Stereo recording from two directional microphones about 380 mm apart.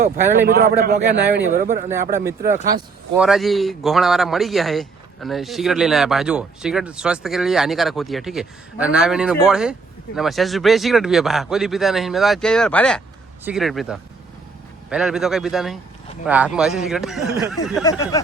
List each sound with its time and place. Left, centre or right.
0.0 s speech: right
2.6 s a man's voice: centre